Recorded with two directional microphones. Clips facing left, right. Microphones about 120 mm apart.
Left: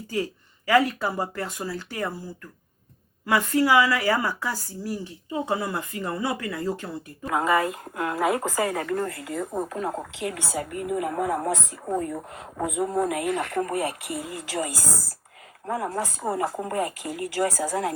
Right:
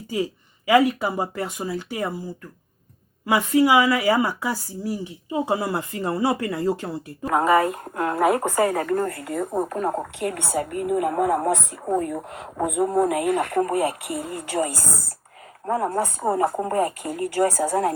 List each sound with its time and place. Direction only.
0.1 s speech: 20° right (ahead or behind)
7.3 s a woman's voice: 55° right (ahead or behind)